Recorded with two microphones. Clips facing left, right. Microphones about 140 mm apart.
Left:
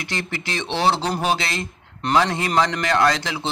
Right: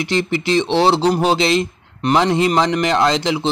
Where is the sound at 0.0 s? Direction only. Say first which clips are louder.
Right 10 dB; 25° right (ahead or behind).